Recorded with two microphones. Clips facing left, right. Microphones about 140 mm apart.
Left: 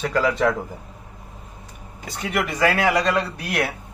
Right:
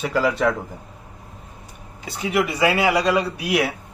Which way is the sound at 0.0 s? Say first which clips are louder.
Even; 5° right (ahead or behind).